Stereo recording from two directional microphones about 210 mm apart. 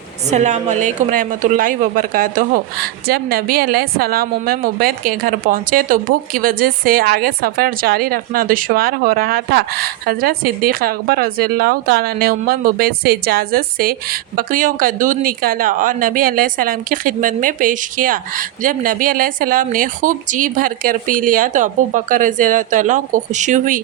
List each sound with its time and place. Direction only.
0.3 s a woman's voice: 35° right (ahead or behind)